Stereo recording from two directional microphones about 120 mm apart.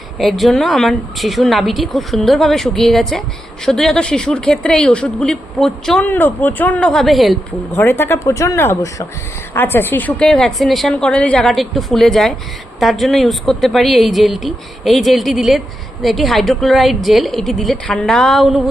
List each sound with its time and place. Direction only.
0.2 s speech: centre (ahead or behind)
6.1 s speech: 15° left (ahead or behind); by 7.3 s centre (ahead or behind)
7.8 s speech: 20° left (ahead or behind); by 18.6 s centre (ahead or behind)